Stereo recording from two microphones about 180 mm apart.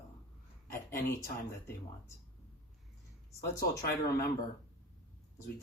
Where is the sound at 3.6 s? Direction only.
60° left (ahead or behind).